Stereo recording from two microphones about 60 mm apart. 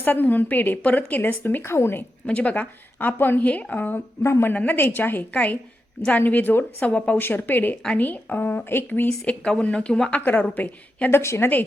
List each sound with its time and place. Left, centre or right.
0.0 s a woman's voice: left
1.6 s a woman's voice: left
2.2 s a woman's voice: left
4.2 s a woman's voice: left
4.5 s a woman's voice: left
6.8 s a woman's voice: left
7.2 s a woman's voice: left
9.0 s a woman's voice: centre
10.1 s a woman's voice: left
11.2 s a woman's voice: left